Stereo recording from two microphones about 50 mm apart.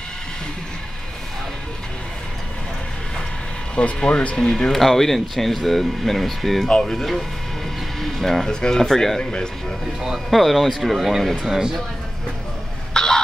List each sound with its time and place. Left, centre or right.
3.7 s speech: centre
9.2 s speech: centre
10.0 s speech: centre
12.9 s a sound: centre